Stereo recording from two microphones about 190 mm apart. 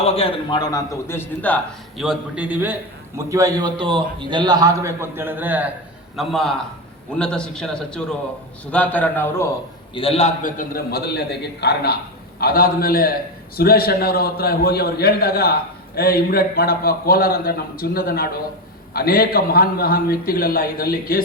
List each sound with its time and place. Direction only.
0.0 s a man's voice: 30° left (ahead or behind); by 1.6 s 10° left (ahead or behind)
2.0 s a man's voice: 5° right (ahead or behind)
6.1 s a man's voice: centre (ahead or behind)
9.9 s a man's voice: 30° left (ahead or behind); by 21.2 s 50° left (ahead or behind)